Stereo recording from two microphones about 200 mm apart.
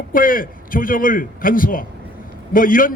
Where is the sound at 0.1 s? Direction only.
45° left (ahead or behind).